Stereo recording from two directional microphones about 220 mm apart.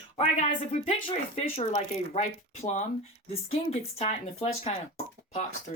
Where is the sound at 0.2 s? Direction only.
30° left (ahead or behind).